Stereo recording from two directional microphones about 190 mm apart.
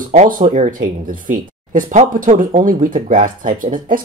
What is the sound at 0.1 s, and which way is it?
Speech, 40° right (ahead or behind).